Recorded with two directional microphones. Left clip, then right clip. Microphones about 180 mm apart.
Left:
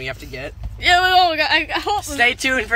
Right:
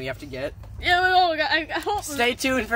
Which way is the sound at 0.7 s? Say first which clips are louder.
Left 5 dB; 45° left (ahead or behind).